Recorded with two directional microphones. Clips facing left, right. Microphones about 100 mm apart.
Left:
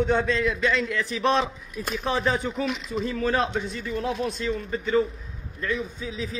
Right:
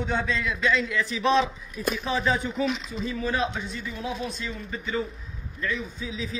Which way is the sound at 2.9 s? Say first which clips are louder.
Left 4 dB; 60° left (ahead or behind).